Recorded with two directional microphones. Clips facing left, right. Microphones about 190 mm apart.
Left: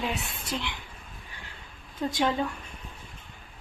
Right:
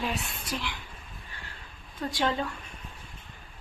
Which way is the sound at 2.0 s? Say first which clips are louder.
Left 2 dB; 15° left (ahead or behind).